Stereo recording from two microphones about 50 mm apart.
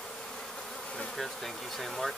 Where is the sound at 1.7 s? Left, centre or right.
Centre.